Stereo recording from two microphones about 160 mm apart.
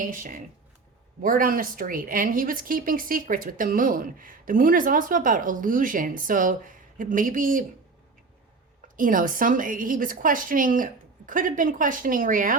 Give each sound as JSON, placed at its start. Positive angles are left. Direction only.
{"t": 0.1, "sound": "speech", "side_deg": -55}
{"t": 9.0, "sound": "speech", "side_deg": -60}